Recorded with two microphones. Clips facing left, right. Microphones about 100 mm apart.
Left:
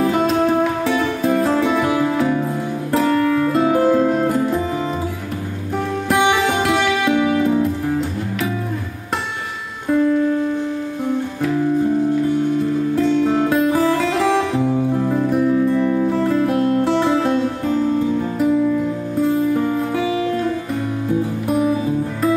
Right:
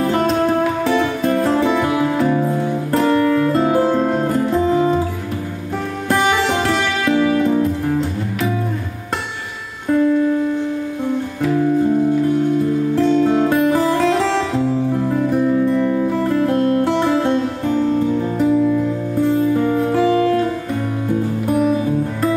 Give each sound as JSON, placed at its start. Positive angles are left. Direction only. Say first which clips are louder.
{"t": 0.0, "sound": "music", "louder": "even", "side_deg": 5}
{"t": 6.0, "sound": "music", "louder": "even", "side_deg": 5}
{"t": 9.8, "sound": "music", "louder": "right 1 dB", "side_deg": 0}
{"t": 12.9, "sound": "music", "louder": "right 2 dB", "side_deg": 0}
{"t": 16.4, "sound": "music", "louder": "right 1 dB", "side_deg": 5}
{"t": 20.1, "sound": "music", "louder": "right 5 dB", "side_deg": -55}
{"t": 21.1, "sound": "music", "louder": "right 1 dB", "side_deg": 0}